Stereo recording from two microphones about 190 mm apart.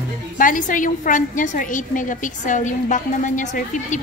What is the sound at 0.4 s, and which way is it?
A woman's voice, 45° left (ahead or behind).